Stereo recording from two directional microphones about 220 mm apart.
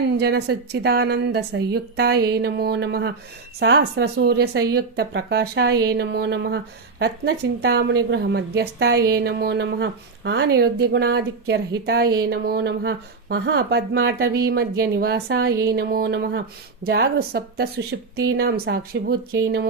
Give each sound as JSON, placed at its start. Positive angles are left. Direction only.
{"t": 0.2, "sound": "a woman's voice", "side_deg": -45}